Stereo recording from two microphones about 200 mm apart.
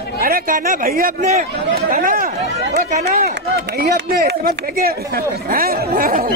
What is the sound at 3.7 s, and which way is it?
Speech, 50° right (ahead or behind).